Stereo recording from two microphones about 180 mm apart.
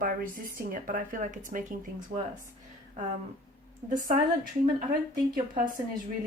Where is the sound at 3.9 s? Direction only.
50° right (ahead or behind).